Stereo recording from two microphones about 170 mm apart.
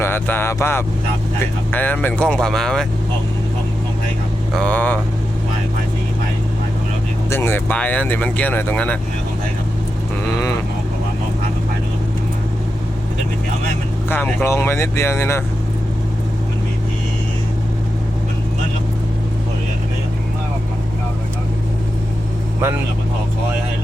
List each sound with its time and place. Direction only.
0.0 s speech: 15° left (ahead or behind)
4.5 s speech: 10° left (ahead or behind)
7.3 s speech: 15° left (ahead or behind)
14.1 s speech: 15° left (ahead or behind)